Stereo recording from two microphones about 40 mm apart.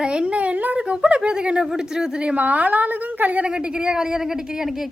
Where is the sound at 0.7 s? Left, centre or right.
Right.